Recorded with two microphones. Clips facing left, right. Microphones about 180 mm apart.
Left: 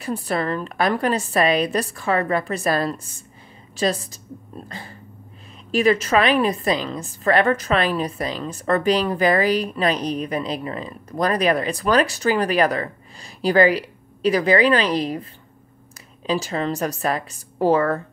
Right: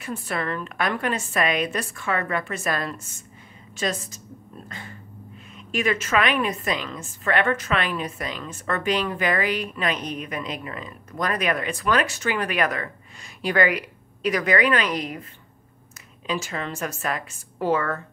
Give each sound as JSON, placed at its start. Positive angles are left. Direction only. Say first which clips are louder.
{"t": 0.0, "sound": "a woman's voice", "louder": "left 5 dB", "side_deg": 35}
{"t": 16.3, "sound": "a woman's voice", "louder": "left 6 dB", "side_deg": 35}